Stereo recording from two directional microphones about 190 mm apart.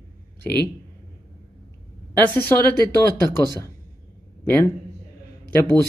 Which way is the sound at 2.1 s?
10° left (ahead or behind).